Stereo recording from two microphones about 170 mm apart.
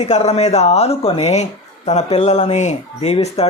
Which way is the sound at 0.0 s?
40° left (ahead or behind).